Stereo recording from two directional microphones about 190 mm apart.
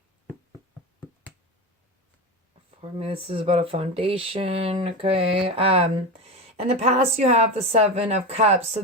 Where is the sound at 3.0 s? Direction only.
30° right (ahead or behind).